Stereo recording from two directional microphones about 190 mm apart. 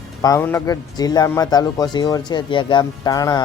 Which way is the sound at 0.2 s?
15° left (ahead or behind).